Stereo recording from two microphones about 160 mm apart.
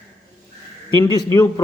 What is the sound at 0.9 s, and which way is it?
Speech, 15° left (ahead or behind).